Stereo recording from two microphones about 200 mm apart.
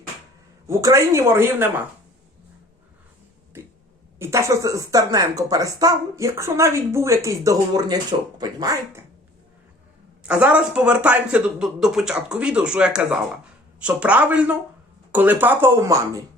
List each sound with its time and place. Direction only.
0.7 s speech: 15° right (ahead or behind)
4.2 s speech: 15° right (ahead or behind)
10.2 s speech: 5° right (ahead or behind)